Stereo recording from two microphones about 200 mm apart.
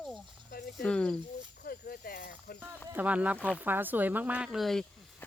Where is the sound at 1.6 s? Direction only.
50° left (ahead or behind).